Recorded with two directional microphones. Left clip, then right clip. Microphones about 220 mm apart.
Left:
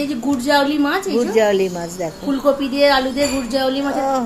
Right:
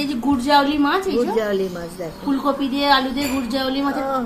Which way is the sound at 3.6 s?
25° right (ahead or behind).